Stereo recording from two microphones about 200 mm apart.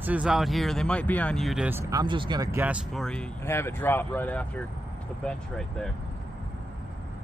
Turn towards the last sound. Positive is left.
turn(degrees=5)  # may be behind; listen again after turning